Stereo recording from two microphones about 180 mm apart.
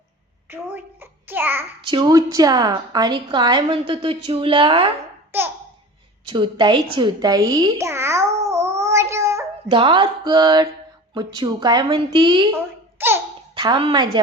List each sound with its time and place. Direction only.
0.5 s child singing: 10° right (ahead or behind)
1.9 s a woman's voice: 20° right (ahead or behind)
5.3 s babbling: 10° right (ahead or behind)
6.2 s a woman's voice: 25° right (ahead or behind)
9.6 s a woman's voice: 25° right (ahead or behind)
13.0 s babbling: 15° right (ahead or behind)
13.6 s a woman's voice: 25° right (ahead or behind)